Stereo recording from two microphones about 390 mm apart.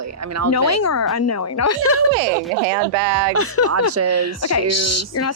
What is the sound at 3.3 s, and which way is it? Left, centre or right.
A woman's voice, left.